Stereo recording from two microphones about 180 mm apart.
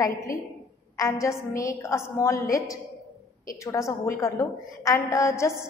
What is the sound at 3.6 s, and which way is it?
A woman's voice, 15° left (ahead or behind).